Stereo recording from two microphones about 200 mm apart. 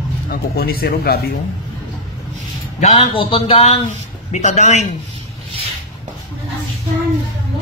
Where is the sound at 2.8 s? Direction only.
35° left (ahead or behind).